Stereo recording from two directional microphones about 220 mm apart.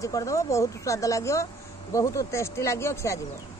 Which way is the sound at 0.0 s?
15° left (ahead or behind).